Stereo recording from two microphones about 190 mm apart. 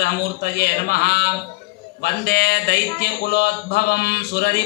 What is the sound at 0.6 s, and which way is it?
Speech, 55° left (ahead or behind).